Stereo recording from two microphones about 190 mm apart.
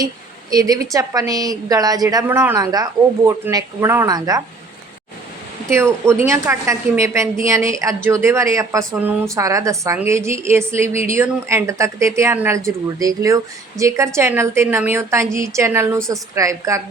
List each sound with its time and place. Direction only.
0.5 s a woman's voice: 20° right (ahead or behind)
5.6 s a woman's voice: 15° right (ahead or behind)